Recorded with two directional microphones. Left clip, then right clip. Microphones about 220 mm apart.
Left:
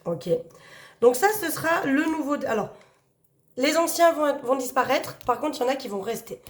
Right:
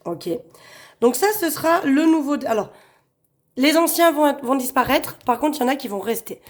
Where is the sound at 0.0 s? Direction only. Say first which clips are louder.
Left 1 dB; 45° right (ahead or behind).